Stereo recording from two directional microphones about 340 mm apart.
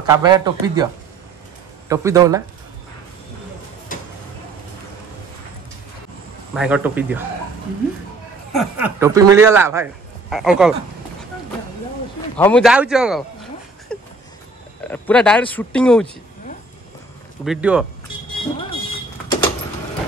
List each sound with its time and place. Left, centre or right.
0.0 s speech: centre
1.9 s speech: centre
6.5 s speech: centre
8.5 s speech: centre
12.4 s speech: centre
17.5 s speech: centre